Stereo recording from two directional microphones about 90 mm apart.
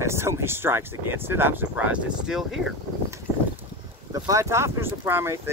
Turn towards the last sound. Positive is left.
turn(degrees=-30)  # may be behind; listen again after turning